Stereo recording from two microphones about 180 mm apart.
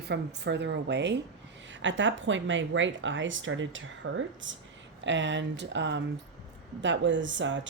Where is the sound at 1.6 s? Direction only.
90° right.